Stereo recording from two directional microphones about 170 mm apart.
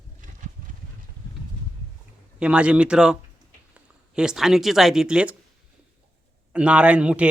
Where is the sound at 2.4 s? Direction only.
5° right (ahead or behind).